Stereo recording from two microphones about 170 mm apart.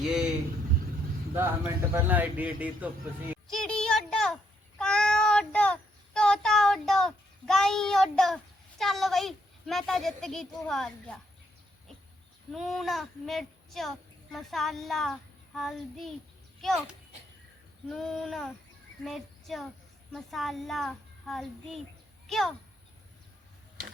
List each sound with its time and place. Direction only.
0.0 s speech: 5° right (ahead or behind)
1.4 s speech: 15° right (ahead or behind)
3.4 s a sound: centre (ahead or behind)
4.8 s child singing: 5° left (ahead or behind)
8.8 s a sound: centre (ahead or behind)
12.5 s a child's voice: centre (ahead or behind)
19.0 s child singing: centre (ahead or behind)
20.1 s a child's voice: centre (ahead or behind)